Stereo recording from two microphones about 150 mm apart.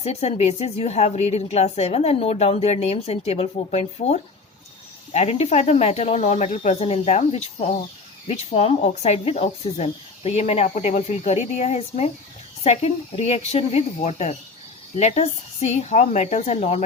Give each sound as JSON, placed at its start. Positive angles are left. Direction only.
{"t": 0.0, "sound": "a woman's voice", "side_deg": 45}